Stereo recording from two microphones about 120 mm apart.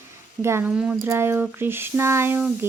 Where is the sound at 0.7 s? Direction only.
5° right (ahead or behind).